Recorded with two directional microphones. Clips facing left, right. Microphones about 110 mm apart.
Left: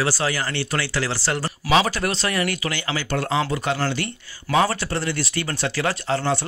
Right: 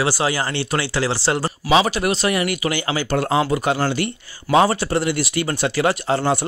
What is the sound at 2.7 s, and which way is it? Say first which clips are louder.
Speech: right 4 dB; 30° right (ahead or behind).